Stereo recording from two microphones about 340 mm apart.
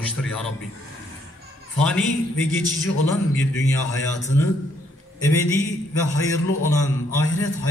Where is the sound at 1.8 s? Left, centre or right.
Centre.